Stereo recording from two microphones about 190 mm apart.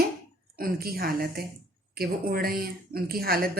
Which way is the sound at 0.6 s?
50° right (ahead or behind).